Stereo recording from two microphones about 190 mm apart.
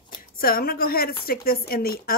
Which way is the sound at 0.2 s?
50° left (ahead or behind).